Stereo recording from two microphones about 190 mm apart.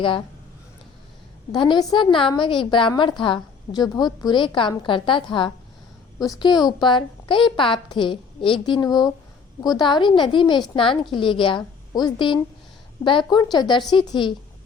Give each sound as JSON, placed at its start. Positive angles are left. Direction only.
{"t": 1.5, "sound": "a woman's voice", "side_deg": 20}